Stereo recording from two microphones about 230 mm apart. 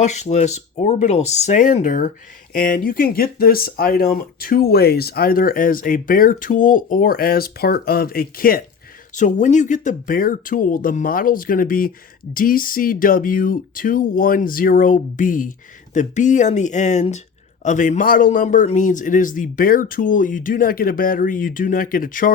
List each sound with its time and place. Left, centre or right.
0.0 s speech: left